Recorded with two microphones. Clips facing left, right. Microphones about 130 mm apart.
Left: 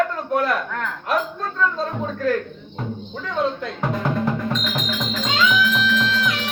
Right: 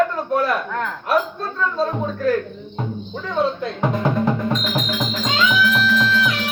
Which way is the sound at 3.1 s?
15° right (ahead or behind).